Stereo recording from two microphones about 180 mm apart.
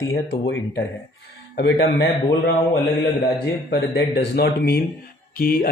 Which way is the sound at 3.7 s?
70° left (ahead or behind).